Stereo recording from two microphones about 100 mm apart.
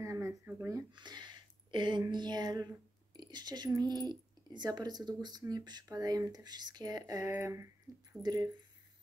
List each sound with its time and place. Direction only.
0.0 s a sound: 30° right (ahead or behind)
0.9 s a woman's voice: 45° right (ahead or behind); by 7.7 s 30° right (ahead or behind)
8.2 s speech: 40° right (ahead or behind)